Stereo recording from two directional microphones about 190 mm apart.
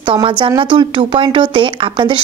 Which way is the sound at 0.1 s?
25° right (ahead or behind).